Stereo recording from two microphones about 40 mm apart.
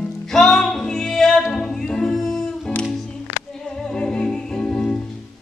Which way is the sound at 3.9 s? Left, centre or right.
Centre.